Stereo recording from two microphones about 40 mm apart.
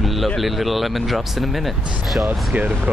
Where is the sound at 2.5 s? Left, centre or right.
Right.